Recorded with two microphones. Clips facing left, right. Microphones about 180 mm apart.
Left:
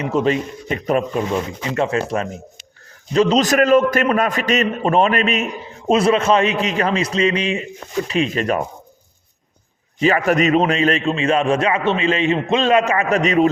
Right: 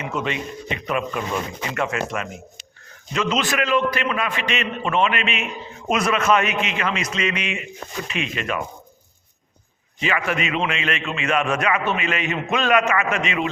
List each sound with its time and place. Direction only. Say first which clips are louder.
0.0 s a man's voice: left 8 dB; 35° left (ahead or behind)
5.9 s a man's voice: left 5 dB; 30° left (ahead or behind)
10.0 s a man's voice: left 8 dB; 40° left (ahead or behind)